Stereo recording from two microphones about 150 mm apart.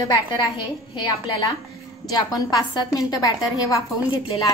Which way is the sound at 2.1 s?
25° left (ahead or behind).